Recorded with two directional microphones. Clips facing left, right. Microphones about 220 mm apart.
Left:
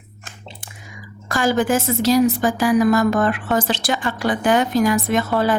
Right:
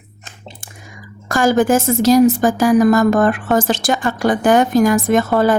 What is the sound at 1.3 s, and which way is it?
A woman's voice, 45° right (ahead or behind).